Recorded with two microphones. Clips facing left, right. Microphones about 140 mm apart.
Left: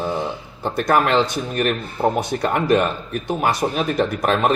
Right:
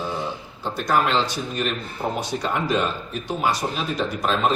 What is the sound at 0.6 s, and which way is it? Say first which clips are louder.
Speech: left 4 dB; 55° left (ahead or behind).